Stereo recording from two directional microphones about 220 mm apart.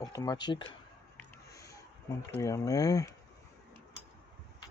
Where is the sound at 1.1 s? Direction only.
15° left (ahead or behind).